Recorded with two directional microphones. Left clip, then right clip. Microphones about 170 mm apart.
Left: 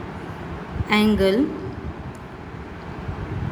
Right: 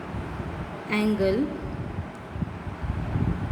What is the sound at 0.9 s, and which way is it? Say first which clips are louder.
Speech: left 6 dB; 45° left (ahead or behind).